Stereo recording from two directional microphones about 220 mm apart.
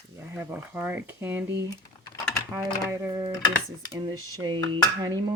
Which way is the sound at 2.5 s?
10° right (ahead or behind).